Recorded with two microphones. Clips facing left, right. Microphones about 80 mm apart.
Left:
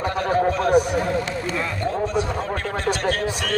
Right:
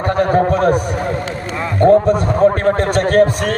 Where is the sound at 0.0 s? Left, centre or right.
Right.